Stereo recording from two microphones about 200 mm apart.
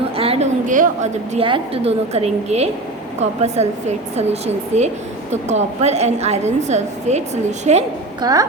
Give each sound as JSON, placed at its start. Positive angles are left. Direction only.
{"t": 0.2, "sound": "a sound", "side_deg": -30}
{"t": 1.3, "sound": "a woman's voice", "side_deg": -25}
{"t": 8.2, "sound": "a woman's voice", "side_deg": -20}